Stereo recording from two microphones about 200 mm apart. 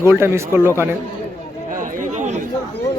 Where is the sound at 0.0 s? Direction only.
10° right (ahead or behind).